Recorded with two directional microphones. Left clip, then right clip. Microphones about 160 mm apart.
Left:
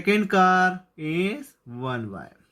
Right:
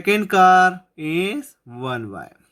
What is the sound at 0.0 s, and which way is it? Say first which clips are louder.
Speech: right 5 dB; 45° right (ahead or behind).